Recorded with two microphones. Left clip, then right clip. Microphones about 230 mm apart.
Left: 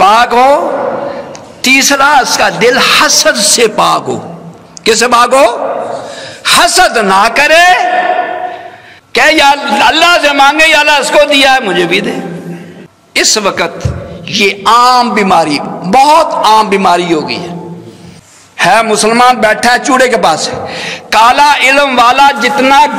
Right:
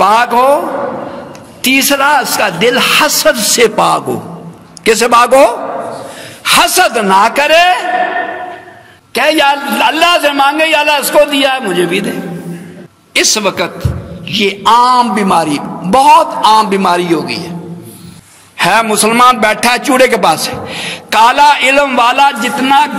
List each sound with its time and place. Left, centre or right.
0.0 s a man's voice: right
1.6 s a man's voice: right
9.1 s a man's voice: right
18.6 s a man's voice: right